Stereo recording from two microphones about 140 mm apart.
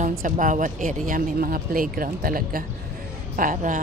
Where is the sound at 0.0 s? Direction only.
65° right (ahead or behind); by 2.6 s 90° right.